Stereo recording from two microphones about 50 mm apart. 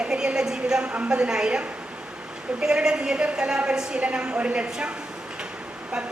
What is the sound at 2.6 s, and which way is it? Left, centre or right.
A woman's voice, centre.